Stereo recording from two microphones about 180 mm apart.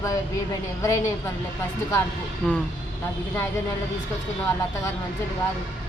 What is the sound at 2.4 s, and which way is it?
Speech, 10° left (ahead or behind).